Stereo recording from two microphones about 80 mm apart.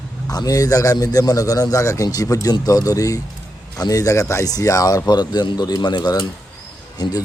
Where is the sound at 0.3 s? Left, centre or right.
Left.